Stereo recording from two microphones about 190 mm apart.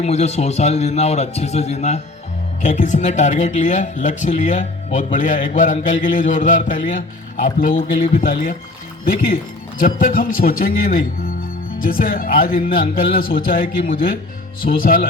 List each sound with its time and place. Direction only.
0.0 s a man's voice: 35° left (ahead or behind)